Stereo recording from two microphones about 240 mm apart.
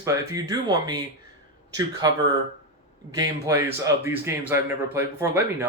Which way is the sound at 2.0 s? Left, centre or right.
Centre.